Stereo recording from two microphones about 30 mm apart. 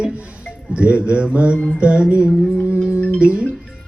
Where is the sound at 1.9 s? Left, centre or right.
Right.